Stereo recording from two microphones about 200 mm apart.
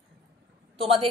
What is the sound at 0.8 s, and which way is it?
Speech, 30° right (ahead or behind).